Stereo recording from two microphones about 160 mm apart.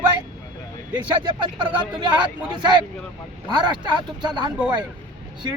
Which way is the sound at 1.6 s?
30° right (ahead or behind).